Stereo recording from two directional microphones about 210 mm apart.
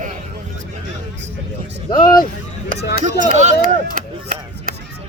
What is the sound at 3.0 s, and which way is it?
Speech, 35° right (ahead or behind).